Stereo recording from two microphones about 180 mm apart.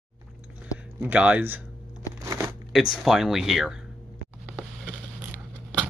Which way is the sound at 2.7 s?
Centre (ahead or behind).